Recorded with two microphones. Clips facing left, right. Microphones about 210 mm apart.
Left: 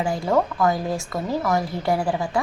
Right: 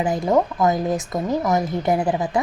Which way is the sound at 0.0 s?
20° right (ahead or behind).